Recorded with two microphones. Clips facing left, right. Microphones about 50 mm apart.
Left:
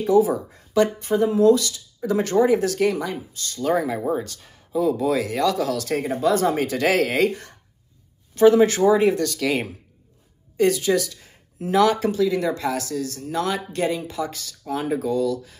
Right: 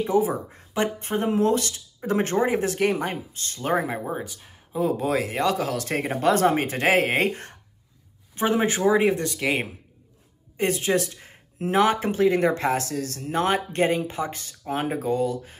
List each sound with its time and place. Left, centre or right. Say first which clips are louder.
0.0 s speech: left 4 dB; right
4.1 s speech: left 6 dB; centre
4.7 s speech: left 3 dB; right
8.4 s speech: left 8 dB; right